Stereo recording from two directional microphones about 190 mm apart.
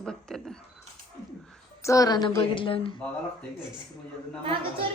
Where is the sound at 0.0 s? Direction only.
5° left (ahead or behind).